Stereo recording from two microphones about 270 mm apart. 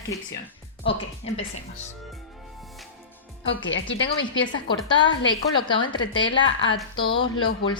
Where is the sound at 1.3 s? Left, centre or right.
Left.